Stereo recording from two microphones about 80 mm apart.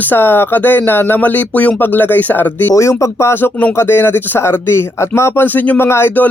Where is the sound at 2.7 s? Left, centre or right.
Left.